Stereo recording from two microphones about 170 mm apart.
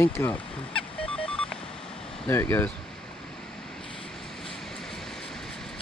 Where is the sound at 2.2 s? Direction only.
15° left (ahead or behind).